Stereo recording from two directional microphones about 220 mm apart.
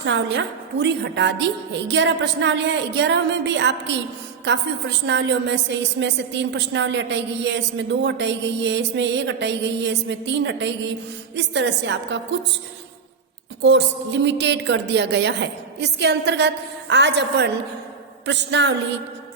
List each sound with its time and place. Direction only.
0.0 s a woman's voice: 55° right (ahead or behind)
13.6 s a woman's voice: 55° right (ahead or behind)